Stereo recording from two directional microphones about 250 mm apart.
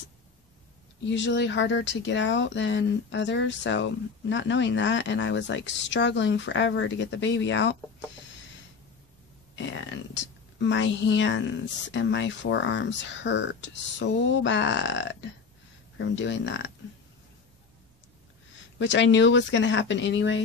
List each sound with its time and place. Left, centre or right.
1.0 s speech: left
9.6 s speech: left
18.8 s speech: left